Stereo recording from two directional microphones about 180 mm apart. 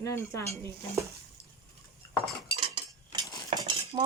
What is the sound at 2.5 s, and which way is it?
Cutlery, 25° right (ahead or behind).